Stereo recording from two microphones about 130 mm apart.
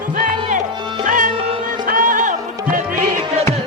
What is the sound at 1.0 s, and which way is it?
Music, 90° right.